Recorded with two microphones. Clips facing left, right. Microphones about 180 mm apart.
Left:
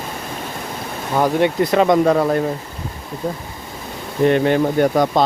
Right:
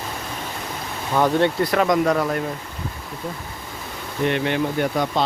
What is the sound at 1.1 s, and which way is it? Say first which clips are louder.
Speech: left 2 dB; 15° left (ahead or behind).